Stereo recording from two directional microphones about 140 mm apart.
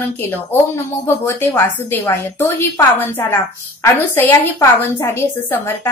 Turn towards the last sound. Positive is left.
turn(degrees=15)  # may be behind; listen again after turning